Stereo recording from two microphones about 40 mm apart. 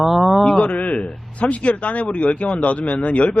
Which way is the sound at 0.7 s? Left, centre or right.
Left.